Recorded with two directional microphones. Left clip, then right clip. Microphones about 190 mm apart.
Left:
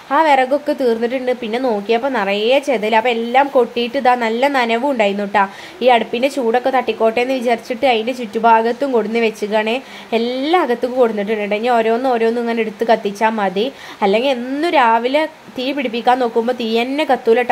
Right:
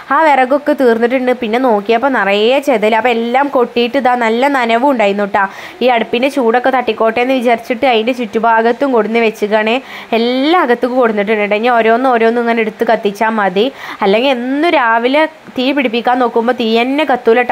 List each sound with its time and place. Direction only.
0.1 s a woman's voice: 20° right (ahead or behind)